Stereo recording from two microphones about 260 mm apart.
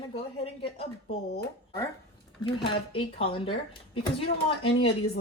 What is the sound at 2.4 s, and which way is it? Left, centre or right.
Speech, centre.